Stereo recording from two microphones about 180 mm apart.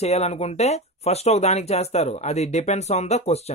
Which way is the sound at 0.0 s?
35° left (ahead or behind).